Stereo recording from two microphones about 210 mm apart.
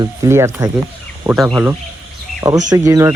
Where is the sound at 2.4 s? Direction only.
15° right (ahead or behind).